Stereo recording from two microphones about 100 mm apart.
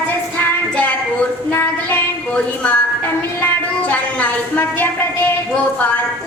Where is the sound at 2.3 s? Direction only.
15° left (ahead or behind).